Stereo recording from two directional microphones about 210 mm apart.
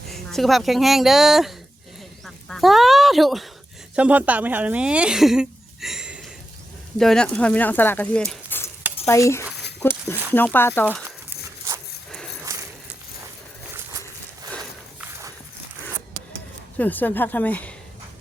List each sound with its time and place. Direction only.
0.1 s speech: centre (ahead or behind)
16.7 s speech: 10° left (ahead or behind)